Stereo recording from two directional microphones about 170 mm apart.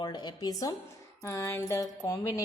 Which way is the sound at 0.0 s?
25° left (ahead or behind).